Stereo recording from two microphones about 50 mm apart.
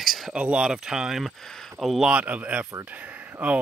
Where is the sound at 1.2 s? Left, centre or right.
Centre.